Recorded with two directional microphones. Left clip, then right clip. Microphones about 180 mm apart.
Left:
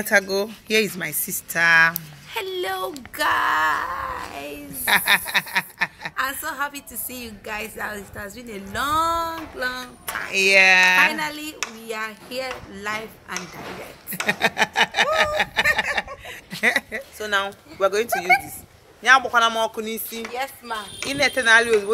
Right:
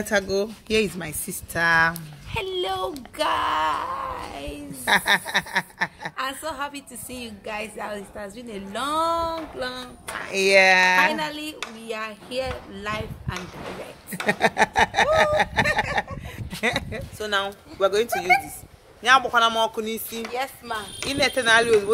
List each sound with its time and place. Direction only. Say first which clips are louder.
0.0 s speech: left 3 dB; centre (ahead or behind); by 2.0 s 30° right (ahead or behind)
2.0 s speech: left 1 dB; centre (ahead or behind)
4.8 s a sound: left 1 dB; 35° right (ahead or behind)
6.1 s a woman's voice: left 5 dB; centre (ahead or behind)
10.3 s speech: left 2 dB; 30° right (ahead or behind)
11.1 s a woman's voice: left 2 dB; 5° left (ahead or behind)
14.2 s speech: even; 35° right (ahead or behind)
15.7 s a sound: left 2 dB; 35° right (ahead or behind)
16.6 s a woman's voice: left 5 dB; 5° right (ahead or behind)
20.3 s speech: even; 45° right (ahead or behind)
21.1 s a woman's voice: left 3 dB; 5° right (ahead or behind)